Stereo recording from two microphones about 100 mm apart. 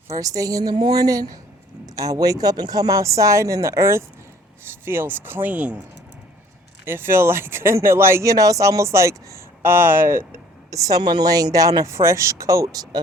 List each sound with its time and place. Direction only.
0.2 s speech: 35° right (ahead or behind); by 5.8 s 15° right (ahead or behind)
6.8 s speech: 25° right (ahead or behind)
10.8 s speech: 40° right (ahead or behind)